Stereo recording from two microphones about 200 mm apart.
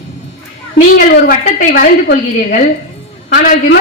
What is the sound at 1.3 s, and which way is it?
Speech, 45° left (ahead or behind).